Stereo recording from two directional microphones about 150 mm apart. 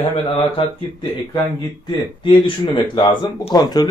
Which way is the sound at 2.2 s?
35° left (ahead or behind).